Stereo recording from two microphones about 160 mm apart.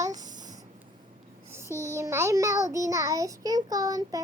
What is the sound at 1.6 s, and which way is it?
Speech, 15° left (ahead or behind).